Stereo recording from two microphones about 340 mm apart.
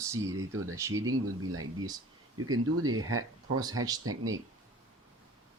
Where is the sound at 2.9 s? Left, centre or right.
Right.